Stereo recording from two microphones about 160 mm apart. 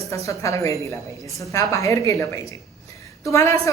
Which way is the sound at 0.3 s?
20° left (ahead or behind).